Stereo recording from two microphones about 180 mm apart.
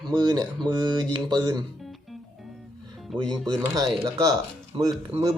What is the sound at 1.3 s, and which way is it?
Speech, 25° right (ahead or behind).